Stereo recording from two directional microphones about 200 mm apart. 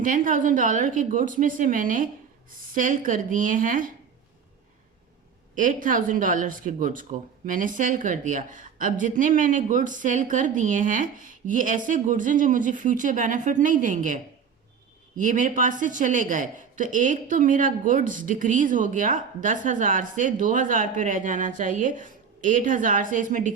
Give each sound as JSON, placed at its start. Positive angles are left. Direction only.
{"t": 0.0, "sound": "speech", "side_deg": -40}
{"t": 5.5, "sound": "speech", "side_deg": -40}